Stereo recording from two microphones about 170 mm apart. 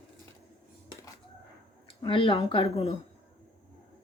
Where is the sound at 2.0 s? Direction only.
30° left (ahead or behind).